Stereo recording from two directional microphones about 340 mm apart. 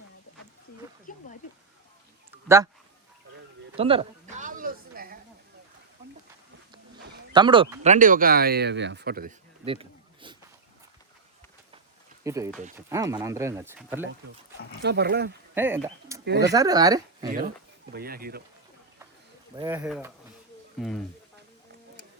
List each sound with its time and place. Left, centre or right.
1.1 s a sound: left
2.3 s a sound: centre
3.8 s a sound: centre
7.3 s speech: centre
12.2 s speech: centre
14.8 s speech: right
15.5 s speech: centre
16.2 s speech: right
16.5 s speech: centre
17.9 s speech: right
19.5 s speech: centre